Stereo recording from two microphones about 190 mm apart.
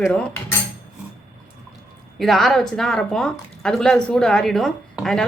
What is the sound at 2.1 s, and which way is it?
Speech, centre (ahead or behind).